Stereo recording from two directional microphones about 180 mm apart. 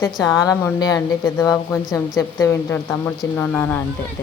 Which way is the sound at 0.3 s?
20° left (ahead or behind).